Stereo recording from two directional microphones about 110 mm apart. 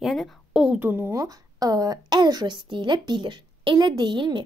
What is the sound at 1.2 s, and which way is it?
A woman's voice, 35° right (ahead or behind).